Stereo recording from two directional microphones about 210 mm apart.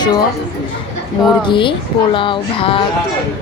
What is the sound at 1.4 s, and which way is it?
Speech, 25° left (ahead or behind).